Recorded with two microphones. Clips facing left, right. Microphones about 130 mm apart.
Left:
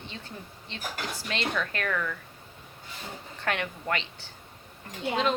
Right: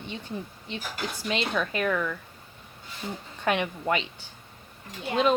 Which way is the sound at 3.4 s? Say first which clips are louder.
Right 5 dB; 15° right (ahead or behind).